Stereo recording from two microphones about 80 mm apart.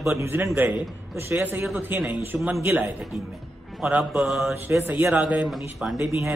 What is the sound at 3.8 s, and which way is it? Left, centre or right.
Speech, centre.